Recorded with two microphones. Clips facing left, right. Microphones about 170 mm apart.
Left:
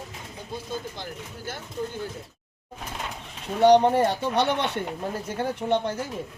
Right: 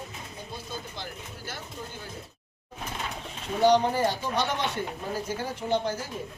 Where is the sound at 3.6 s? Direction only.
65° left (ahead or behind).